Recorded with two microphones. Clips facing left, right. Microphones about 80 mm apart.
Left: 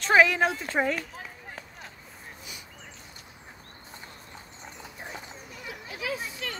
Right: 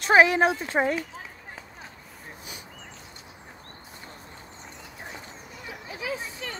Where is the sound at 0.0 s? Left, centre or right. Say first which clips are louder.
Right 2 dB; right.